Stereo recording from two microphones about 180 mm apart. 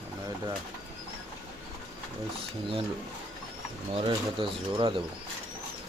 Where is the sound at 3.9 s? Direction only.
30° right (ahead or behind).